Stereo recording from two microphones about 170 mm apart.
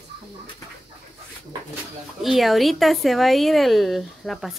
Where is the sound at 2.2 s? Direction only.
Centre (ahead or behind).